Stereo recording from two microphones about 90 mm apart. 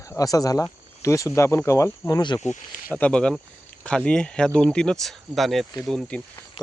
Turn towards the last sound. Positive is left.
turn(degrees=5)  # may be behind; listen again after turning